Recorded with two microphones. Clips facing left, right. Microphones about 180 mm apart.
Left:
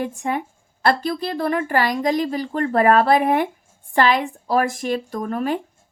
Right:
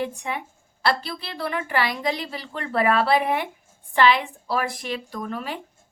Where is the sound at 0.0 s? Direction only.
45° left (ahead or behind).